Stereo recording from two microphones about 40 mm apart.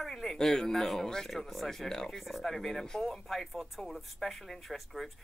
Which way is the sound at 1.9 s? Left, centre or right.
Centre.